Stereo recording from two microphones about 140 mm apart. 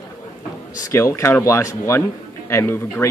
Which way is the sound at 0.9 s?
20° left (ahead or behind).